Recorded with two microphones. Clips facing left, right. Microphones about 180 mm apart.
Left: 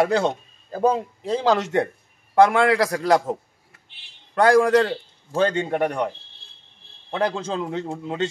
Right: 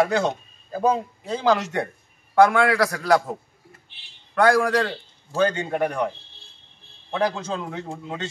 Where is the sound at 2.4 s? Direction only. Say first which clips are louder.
Left 1 dB; 25° left (ahead or behind).